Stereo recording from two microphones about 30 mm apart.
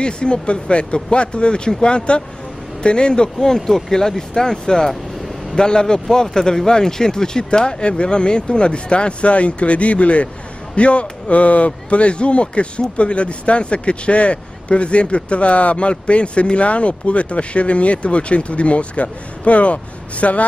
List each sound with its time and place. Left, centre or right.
0.0 s speech: left
3.3 s speech: centre
6.0 s speech: centre; by 20.4 s left